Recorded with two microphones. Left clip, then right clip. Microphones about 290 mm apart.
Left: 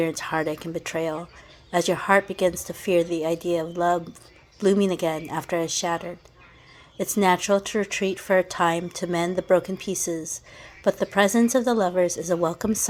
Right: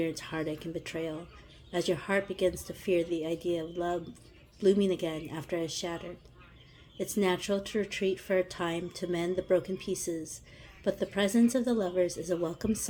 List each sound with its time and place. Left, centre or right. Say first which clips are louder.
0.0 s speech: left 9 dB; centre
7.0 s speech: left 9 dB; centre